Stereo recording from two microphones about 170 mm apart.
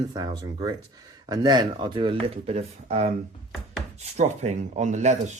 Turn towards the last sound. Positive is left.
turn(degrees=-45)  # may be behind; listen again after turning